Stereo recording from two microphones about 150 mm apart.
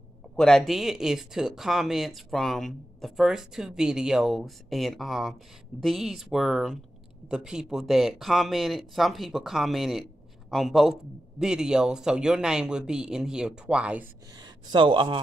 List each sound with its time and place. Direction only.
0.4 s speech: 5° left (ahead or behind)
14.4 s speech: 30° right (ahead or behind)